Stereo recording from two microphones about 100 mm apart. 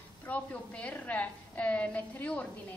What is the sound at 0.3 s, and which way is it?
A woman's voice, 15° left (ahead or behind).